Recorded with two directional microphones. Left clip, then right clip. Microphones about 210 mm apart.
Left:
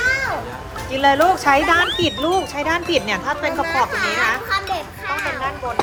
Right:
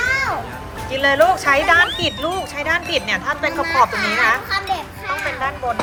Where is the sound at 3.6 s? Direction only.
5° left (ahead or behind).